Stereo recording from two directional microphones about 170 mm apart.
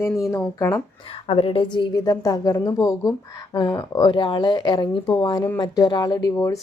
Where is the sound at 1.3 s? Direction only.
30° left (ahead or behind).